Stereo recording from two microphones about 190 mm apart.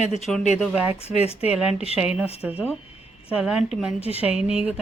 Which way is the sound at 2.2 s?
30° left (ahead or behind).